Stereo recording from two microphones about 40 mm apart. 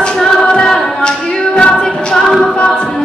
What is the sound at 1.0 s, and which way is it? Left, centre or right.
Music, centre.